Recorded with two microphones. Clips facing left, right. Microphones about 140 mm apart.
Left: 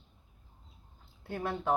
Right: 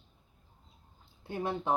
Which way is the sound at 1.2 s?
20° right (ahead or behind).